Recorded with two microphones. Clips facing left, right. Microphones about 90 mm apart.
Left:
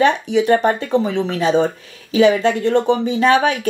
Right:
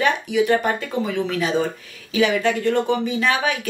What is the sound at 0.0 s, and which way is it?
Speech, 25° left (ahead or behind).